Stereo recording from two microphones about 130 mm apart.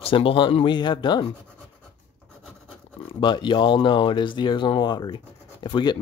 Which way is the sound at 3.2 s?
35° left (ahead or behind).